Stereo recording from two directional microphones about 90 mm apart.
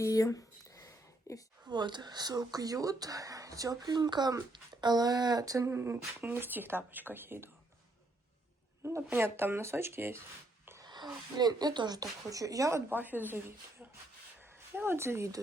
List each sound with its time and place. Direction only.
0.0 s a sound: 40° left (ahead or behind)
1.6 s speech: 55° right (ahead or behind); by 5.7 s 40° right (ahead or behind)
5.7 s speech: 25° right (ahead or behind)
8.8 s speech: 30° right (ahead or behind)
10.8 s speech: 50° right (ahead or behind)
12.9 s speech: 20° right (ahead or behind)